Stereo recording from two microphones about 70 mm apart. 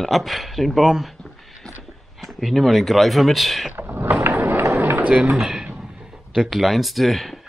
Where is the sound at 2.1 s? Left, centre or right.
Centre.